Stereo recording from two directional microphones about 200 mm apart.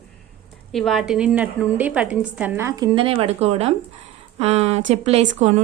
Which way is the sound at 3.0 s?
30° right (ahead or behind).